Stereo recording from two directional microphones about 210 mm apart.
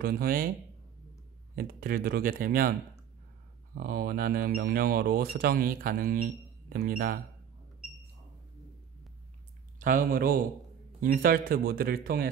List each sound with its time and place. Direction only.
0.0 s speech: 45° right (ahead or behind)
1.5 s speech: 40° right (ahead or behind)
3.7 s speech: 45° right (ahead or behind)
9.8 s speech: 40° right (ahead or behind)